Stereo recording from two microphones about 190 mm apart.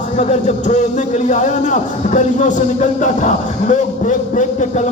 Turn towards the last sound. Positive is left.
turn(degrees=40)  # may be behind; listen again after turning